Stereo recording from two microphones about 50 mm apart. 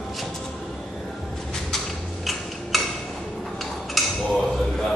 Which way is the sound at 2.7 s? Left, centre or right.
Centre.